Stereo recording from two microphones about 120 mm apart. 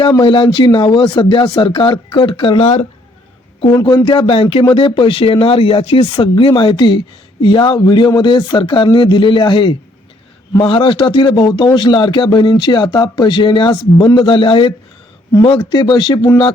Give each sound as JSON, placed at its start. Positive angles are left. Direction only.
{"t": 0.2, "sound": "speech", "side_deg": 45}
{"t": 3.8, "sound": "speech", "side_deg": 40}